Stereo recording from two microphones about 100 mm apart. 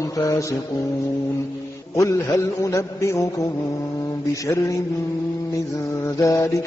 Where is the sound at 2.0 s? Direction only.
30° left (ahead or behind).